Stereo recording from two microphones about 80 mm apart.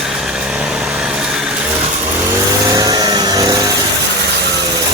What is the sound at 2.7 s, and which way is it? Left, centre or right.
Vehicle, right.